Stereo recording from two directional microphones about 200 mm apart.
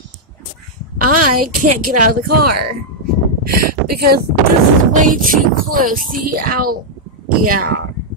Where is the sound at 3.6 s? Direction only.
50° right (ahead or behind).